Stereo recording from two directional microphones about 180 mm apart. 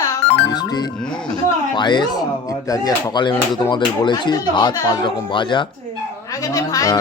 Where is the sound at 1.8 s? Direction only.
25° left (ahead or behind).